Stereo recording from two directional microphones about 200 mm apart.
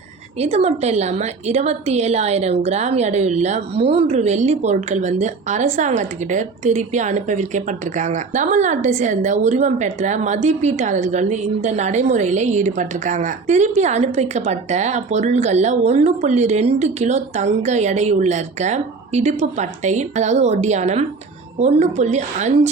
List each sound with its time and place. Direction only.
0.3 s a woman's voice: 30° right (ahead or behind)